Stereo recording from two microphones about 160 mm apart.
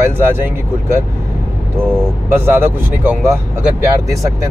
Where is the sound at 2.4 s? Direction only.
15° right (ahead or behind).